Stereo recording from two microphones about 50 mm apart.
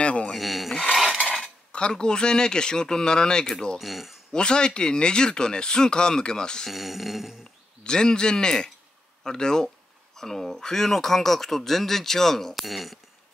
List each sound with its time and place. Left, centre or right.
0.0 s rub: left
0.4 s rub: centre
0.8 s cutlery: centre
1.7 s speech: left
3.8 s speech: centre
4.3 s speech: centre
6.7 s speech: centre
7.8 s speech: centre